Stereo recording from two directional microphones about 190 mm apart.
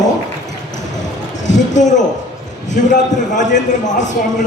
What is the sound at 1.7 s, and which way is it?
A man's voice, 40° left (ahead or behind).